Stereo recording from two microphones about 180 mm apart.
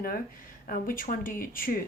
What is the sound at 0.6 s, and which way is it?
Speech, 50° left (ahead or behind).